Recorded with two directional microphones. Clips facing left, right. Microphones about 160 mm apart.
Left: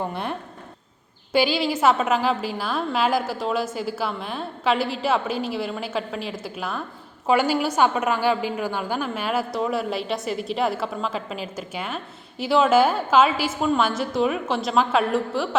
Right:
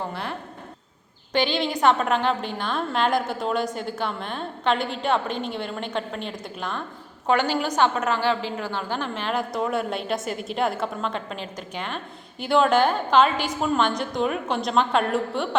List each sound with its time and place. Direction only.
0.1 s speech: 20° left (ahead or behind)
1.3 s a woman's voice: 10° left (ahead or behind)